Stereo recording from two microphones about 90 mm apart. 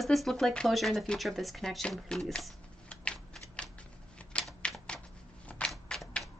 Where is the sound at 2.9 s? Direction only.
10° left (ahead or behind).